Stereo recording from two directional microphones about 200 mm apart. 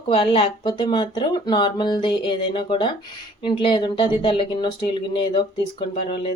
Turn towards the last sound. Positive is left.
turn(degrees=25)  # may be behind; listen again after turning